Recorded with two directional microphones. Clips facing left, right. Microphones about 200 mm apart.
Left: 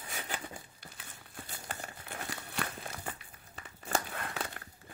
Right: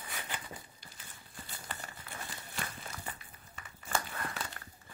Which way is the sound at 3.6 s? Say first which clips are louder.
Left 2 dB; 40° left (ahead or behind).